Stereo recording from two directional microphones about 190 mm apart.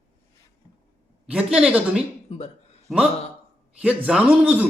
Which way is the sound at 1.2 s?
5° right (ahead or behind).